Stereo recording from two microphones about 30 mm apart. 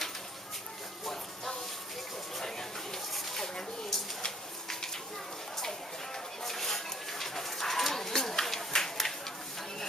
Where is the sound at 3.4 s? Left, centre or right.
Centre.